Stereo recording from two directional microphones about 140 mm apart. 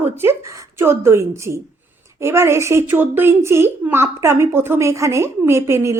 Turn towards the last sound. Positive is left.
turn(degrees=-20)  # may be behind; listen again after turning